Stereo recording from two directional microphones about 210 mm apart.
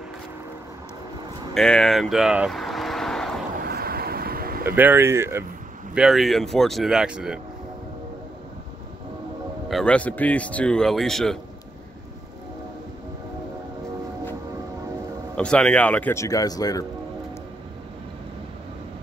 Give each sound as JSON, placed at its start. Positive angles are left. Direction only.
{"t": 1.5, "sound": "vehicle", "side_deg": 5}
{"t": 3.6, "sound": "vehicle", "side_deg": -45}
{"t": 4.6, "sound": "speech", "side_deg": -10}
{"t": 5.9, "sound": "speech", "side_deg": 0}
{"t": 9.7, "sound": "speech", "side_deg": 5}
{"t": 15.3, "sound": "speech", "side_deg": 5}